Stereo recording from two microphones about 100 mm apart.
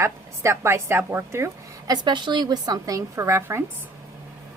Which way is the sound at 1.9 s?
50° right (ahead or behind).